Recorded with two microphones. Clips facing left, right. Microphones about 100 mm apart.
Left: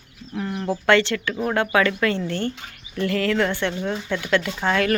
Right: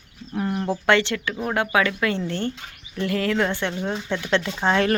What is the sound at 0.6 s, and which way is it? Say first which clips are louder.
Speech: left 2 dB; 20° right (ahead or behind).